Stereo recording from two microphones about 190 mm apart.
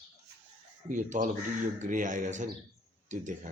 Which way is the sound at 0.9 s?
40° right (ahead or behind).